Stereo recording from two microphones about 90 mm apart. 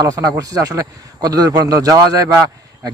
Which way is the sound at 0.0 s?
40° right (ahead or behind).